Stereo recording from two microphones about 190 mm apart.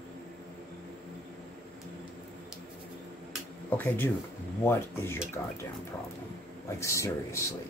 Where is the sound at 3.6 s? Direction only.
10° left (ahead or behind).